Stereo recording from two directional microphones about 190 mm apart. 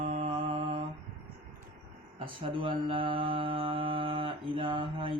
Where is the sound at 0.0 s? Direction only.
35° right (ahead or behind).